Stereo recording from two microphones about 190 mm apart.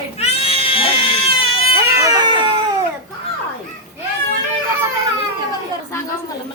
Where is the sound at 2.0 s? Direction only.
20° right (ahead or behind).